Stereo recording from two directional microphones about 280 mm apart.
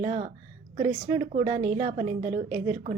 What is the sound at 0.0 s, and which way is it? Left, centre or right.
A woman's voice, right.